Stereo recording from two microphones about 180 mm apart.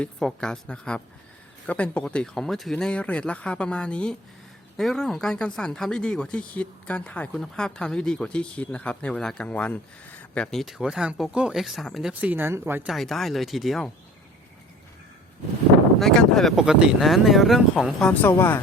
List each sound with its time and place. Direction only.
0.0 s speech: 5° left (ahead or behind)
16.0 s speech: centre (ahead or behind)
18.1 s speech: 10° left (ahead or behind)